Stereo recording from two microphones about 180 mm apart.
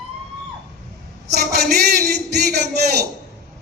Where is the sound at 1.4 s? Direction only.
60° right (ahead or behind).